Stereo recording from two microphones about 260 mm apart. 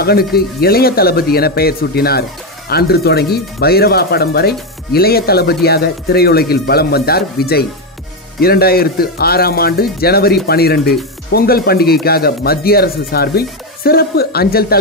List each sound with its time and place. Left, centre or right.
0.0 s speech: left